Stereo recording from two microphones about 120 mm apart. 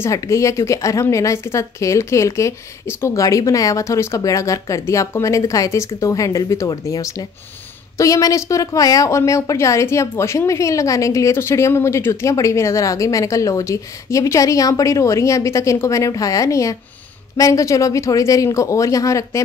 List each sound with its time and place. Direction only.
0.0 s a woman's voice: 25° left (ahead or behind)